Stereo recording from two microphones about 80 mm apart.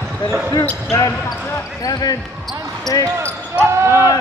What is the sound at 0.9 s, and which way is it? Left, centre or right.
Speech, left.